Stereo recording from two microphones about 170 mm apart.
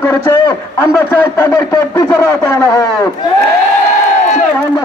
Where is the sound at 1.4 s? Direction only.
20° left (ahead or behind).